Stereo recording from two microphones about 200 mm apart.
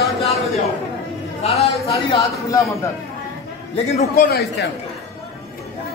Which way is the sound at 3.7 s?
30° left (ahead or behind).